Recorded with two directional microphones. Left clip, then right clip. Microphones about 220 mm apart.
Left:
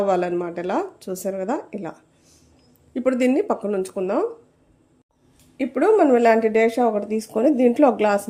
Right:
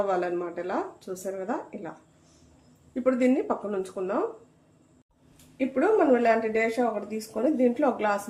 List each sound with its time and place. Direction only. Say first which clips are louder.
0.1 s speech: left 6 dB; 40° left (ahead or behind)
2.9 s speech: left 4 dB; 45° left (ahead or behind)
5.5 s speech: left 6 dB; 50° left (ahead or behind)